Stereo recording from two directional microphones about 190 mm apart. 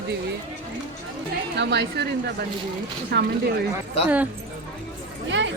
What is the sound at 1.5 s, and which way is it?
Speech, 65° right (ahead or behind).